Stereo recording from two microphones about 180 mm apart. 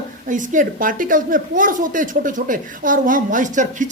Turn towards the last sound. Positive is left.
turn(degrees=-45)  # may be behind; listen again after turning